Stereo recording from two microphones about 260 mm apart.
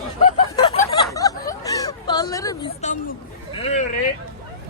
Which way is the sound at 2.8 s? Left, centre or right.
Left.